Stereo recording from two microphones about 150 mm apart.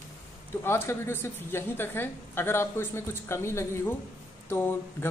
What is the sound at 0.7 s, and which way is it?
A man's voice, 15° left (ahead or behind).